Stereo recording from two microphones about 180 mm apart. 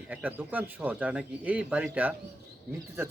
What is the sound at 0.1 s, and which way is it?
A man's voice, 10° right (ahead or behind).